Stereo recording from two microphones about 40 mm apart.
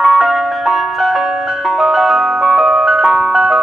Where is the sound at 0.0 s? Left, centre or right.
Centre.